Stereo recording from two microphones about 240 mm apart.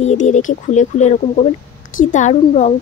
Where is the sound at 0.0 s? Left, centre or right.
Left.